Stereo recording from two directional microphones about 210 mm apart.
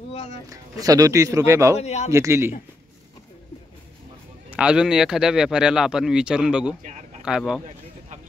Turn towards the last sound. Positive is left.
turn(degrees=-5)  # may be behind; listen again after turning